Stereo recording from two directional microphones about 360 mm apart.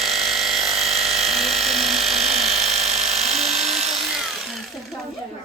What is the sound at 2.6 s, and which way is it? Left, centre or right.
Electric toothbrush, centre.